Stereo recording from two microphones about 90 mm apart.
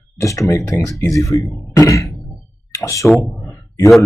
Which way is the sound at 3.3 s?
30° left (ahead or behind).